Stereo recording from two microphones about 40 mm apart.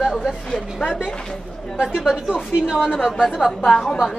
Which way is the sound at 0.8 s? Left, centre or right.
Centre.